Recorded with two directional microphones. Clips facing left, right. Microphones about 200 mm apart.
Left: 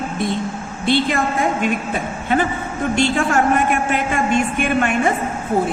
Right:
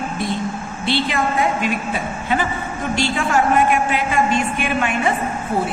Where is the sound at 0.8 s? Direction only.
50° left (ahead or behind).